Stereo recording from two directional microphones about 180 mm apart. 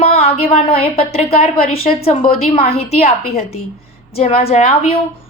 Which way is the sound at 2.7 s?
35° left (ahead or behind).